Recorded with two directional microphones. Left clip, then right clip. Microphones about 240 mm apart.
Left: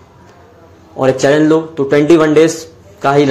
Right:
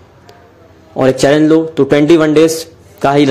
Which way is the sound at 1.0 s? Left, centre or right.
Right.